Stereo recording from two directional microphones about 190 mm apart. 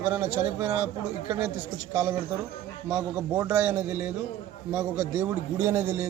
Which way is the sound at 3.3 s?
15° right (ahead or behind).